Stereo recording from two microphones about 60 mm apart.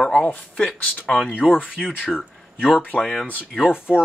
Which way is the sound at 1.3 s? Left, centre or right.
Left.